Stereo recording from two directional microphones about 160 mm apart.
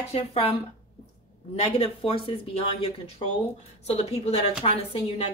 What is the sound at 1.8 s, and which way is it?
Speech, 35° left (ahead or behind).